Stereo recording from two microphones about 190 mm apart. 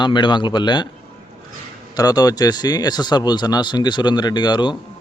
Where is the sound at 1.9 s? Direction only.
20° left (ahead or behind).